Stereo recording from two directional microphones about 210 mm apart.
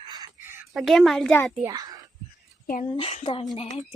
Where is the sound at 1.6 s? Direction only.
15° right (ahead or behind).